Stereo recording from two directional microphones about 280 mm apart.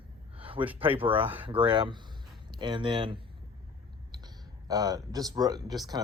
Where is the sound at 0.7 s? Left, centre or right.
Centre.